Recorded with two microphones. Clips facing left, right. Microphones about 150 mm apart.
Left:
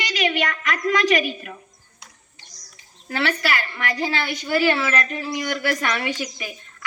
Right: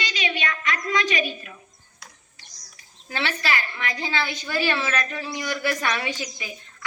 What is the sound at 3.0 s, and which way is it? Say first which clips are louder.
Speech: left 5 dB; 60° left (ahead or behind).